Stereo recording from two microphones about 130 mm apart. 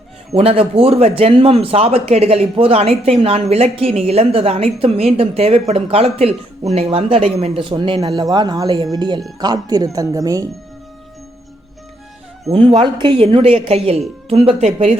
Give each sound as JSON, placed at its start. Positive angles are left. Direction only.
{"t": 0.3, "sound": "a man's voice", "side_deg": -50}
{"t": 12.5, "sound": "a man's voice", "side_deg": -45}